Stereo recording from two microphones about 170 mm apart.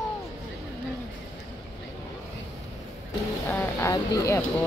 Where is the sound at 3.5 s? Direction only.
15° left (ahead or behind).